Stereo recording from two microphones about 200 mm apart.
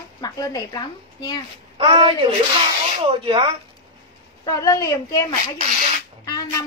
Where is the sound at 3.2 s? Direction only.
25° right (ahead or behind).